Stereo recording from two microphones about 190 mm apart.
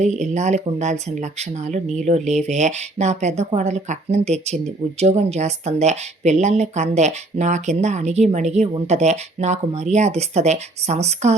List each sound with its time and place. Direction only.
0.0 s speech: 40° right (ahead or behind)